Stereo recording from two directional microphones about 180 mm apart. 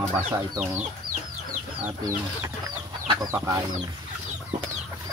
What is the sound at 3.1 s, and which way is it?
Speech, 20° right (ahead or behind).